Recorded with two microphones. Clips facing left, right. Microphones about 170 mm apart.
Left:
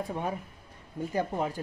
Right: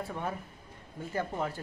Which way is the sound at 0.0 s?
15° left (ahead or behind).